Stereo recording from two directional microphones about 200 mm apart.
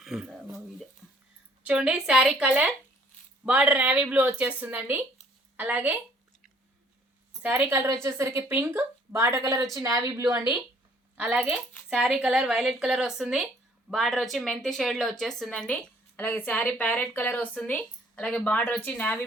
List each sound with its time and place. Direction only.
0.0 s speech: centre (ahead or behind)
7.4 s speech: 10° right (ahead or behind)
11.2 s a woman's voice: 5° right (ahead or behind)